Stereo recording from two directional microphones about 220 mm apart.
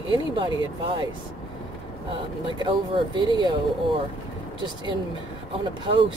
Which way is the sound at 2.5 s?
20° right (ahead or behind).